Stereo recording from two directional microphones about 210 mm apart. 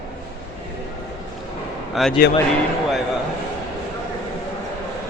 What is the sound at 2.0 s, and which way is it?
Speech, centre (ahead or behind).